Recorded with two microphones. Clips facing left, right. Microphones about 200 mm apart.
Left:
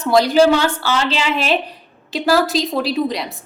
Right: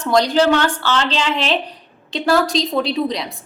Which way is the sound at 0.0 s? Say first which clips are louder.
Left 2 dB; 5° left (ahead or behind).